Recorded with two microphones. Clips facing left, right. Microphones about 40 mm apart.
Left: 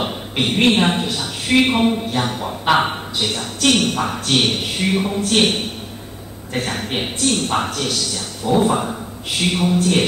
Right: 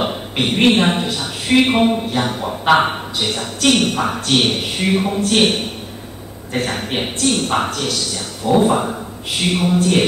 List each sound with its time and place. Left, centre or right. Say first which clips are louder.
0.0 s a man's voice: right 2 dB; centre